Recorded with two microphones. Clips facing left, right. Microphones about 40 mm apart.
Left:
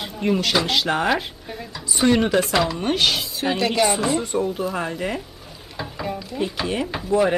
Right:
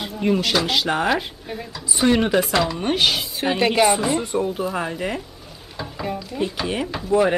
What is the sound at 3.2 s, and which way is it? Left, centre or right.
Speech, right.